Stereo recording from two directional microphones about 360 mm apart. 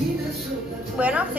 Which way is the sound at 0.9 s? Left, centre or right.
Centre.